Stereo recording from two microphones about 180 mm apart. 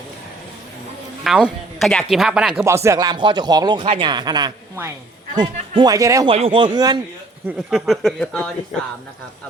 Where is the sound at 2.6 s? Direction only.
15° right (ahead or behind).